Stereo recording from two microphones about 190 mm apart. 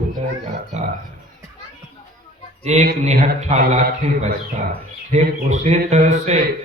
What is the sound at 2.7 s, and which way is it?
A man's voice, 35° right (ahead or behind).